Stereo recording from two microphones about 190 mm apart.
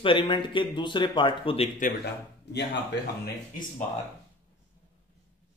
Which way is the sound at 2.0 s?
60° left (ahead or behind).